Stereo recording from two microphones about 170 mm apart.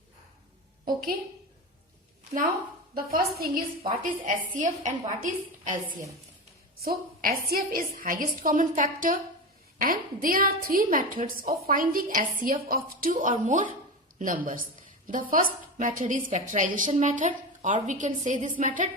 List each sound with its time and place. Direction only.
2.9 s a woman's voice: 60° right (ahead or behind)
6.8 s a woman's voice: 60° right (ahead or behind)